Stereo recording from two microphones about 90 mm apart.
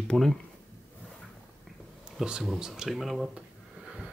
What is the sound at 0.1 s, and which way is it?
Speech, 5° left (ahead or behind).